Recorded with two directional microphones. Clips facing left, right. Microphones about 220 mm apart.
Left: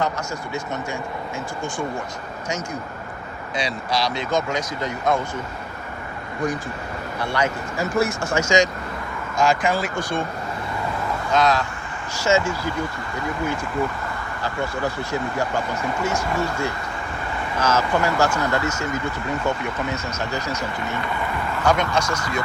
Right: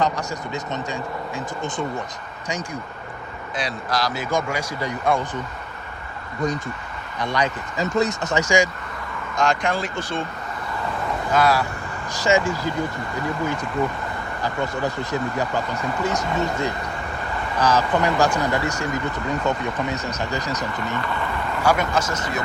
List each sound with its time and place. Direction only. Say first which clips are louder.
0.0 s speech: right 2 dB; 20° right (ahead or behind)
3.5 s speech: left 1 dB; centre (ahead or behind)
7.2 s speech: even; 15° right (ahead or behind)
9.4 s speech: left 2 dB; 5° left (ahead or behind)
11.3 s speech: even; 10° right (ahead or behind)
16.0 s speech: right 1 dB; 20° right (ahead or behind)
19.9 s speech: right 1 dB; 15° right (ahead or behind)
21.6 s speech: even; 5° right (ahead or behind)
22.1 s speech: even; 20° right (ahead or behind)